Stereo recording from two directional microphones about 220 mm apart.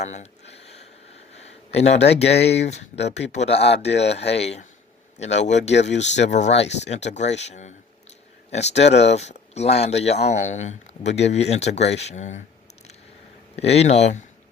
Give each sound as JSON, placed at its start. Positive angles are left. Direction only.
{"t": 0.0, "sound": "a sound", "side_deg": 30}
{"t": 2.6, "sound": "speech", "side_deg": 30}
{"t": 13.6, "sound": "speech", "side_deg": 30}